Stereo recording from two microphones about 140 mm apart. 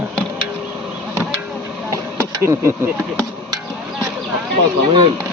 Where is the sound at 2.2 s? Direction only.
20° right (ahead or behind).